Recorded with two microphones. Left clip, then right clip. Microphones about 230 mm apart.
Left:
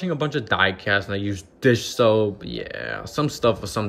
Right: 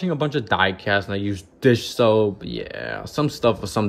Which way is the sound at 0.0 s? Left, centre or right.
Centre.